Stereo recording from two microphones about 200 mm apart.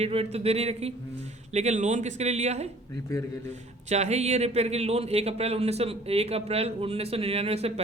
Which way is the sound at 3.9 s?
35° right (ahead or behind).